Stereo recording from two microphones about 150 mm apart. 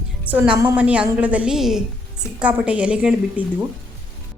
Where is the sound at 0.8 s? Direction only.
10° right (ahead or behind).